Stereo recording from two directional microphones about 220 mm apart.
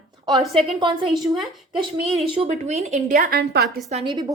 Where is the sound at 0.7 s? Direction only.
25° right (ahead or behind); by 3.7 s 45° right (ahead or behind).